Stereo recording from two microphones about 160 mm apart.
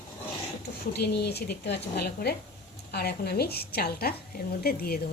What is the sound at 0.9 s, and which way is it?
A woman's voice, 85° left.